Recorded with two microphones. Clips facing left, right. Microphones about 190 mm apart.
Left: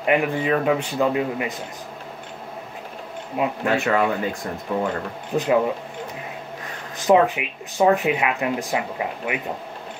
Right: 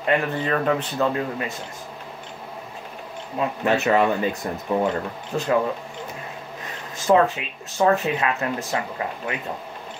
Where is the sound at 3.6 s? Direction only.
20° right (ahead or behind).